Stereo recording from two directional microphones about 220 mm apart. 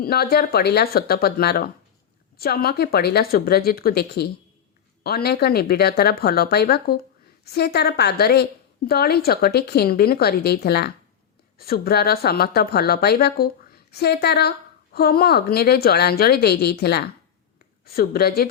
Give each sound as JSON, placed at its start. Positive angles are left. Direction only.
{"t": 0.0, "sound": "a woman's voice", "side_deg": 45}